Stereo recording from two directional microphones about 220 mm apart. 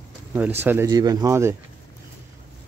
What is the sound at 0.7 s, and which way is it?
Speech, 15° right (ahead or behind).